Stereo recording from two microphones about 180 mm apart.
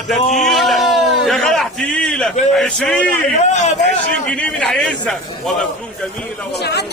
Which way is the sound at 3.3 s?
40° left (ahead or behind).